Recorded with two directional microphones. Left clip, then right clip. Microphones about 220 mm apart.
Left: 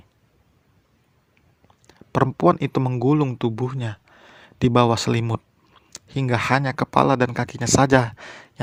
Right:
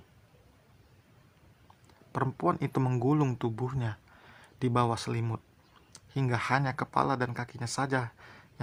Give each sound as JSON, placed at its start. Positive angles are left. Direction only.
{"t": 1.9, "sound": "speech", "side_deg": 30}
{"t": 2.8, "sound": "speech", "side_deg": 15}